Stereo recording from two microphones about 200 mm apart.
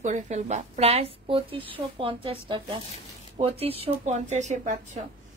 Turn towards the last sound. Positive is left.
turn(degrees=-35)  # may be behind; listen again after turning